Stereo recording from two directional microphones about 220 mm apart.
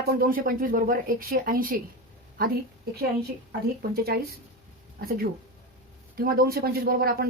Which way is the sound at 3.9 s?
45° right (ahead or behind).